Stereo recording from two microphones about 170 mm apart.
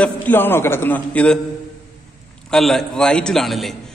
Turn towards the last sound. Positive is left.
turn(degrees=0)  # may be behind; listen again after turning